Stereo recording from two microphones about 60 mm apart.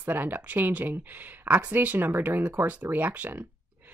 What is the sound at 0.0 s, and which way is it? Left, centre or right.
Speech, right.